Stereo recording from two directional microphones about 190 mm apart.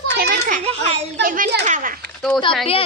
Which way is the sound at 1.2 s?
50° right (ahead or behind).